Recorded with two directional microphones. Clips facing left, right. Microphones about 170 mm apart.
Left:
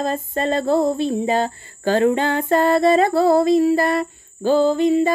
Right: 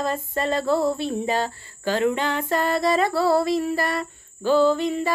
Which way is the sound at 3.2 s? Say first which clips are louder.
Left 6 dB; 20° left (ahead or behind).